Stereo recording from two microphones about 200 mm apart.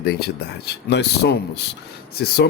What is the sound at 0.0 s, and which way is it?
Speech, 55° left (ahead or behind).